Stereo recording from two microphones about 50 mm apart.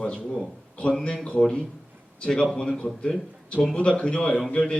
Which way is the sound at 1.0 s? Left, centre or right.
Centre.